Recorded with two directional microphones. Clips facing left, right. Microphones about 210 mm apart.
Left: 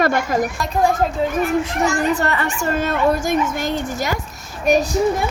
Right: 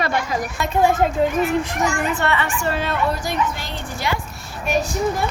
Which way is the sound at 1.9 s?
40° left (ahead or behind).